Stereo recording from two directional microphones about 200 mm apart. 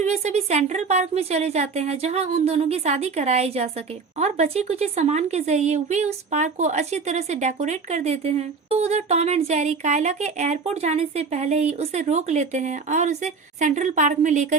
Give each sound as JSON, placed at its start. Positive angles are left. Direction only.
{"t": 0.0, "sound": "a woman's voice", "side_deg": -35}